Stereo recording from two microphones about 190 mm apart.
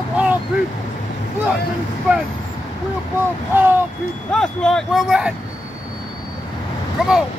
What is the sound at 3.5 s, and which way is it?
Speech, 10° right (ahead or behind).